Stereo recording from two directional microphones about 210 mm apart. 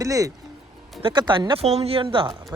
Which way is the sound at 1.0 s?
25° right (ahead or behind).